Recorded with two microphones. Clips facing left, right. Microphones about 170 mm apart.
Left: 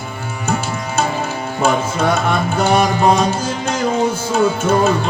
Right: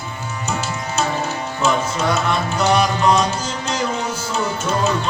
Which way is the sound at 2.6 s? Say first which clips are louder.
Left 3 dB; 50° left (ahead or behind).